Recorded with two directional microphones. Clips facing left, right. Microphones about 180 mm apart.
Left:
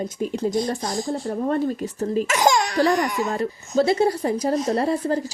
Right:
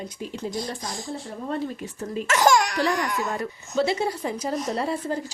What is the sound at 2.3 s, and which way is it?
Laughter, 15° left (ahead or behind).